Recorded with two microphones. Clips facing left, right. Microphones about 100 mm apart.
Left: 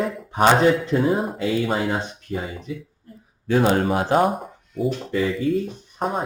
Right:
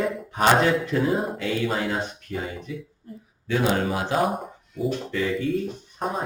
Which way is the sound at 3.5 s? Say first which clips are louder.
Left 4 dB; 40° left (ahead or behind).